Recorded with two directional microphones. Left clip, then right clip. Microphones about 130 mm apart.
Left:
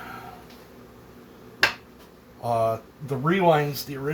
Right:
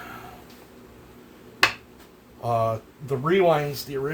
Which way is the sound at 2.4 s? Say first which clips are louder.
Even; 60° right (ahead or behind).